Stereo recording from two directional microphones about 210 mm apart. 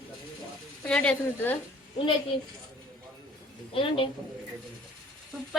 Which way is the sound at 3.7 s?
25° left (ahead or behind).